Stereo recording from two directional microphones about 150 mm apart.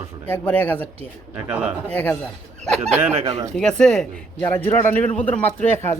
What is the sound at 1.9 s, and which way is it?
Speech, 10° left (ahead or behind).